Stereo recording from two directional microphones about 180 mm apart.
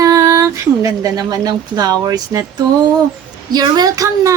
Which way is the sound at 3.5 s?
20° right (ahead or behind).